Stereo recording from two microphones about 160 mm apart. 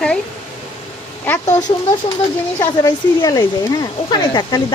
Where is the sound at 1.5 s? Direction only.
50° left (ahead or behind).